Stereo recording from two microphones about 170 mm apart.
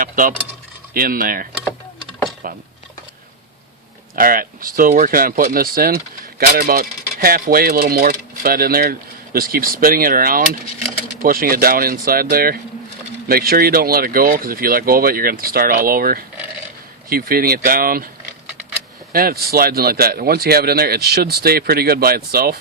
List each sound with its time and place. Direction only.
0.0 s speech: 55° right (ahead or behind)
4.1 s speech: 55° right (ahead or behind)
19.1 s speech: 60° right (ahead or behind)